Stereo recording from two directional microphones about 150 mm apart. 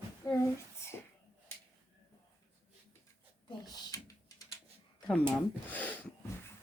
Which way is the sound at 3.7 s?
25° left (ahead or behind).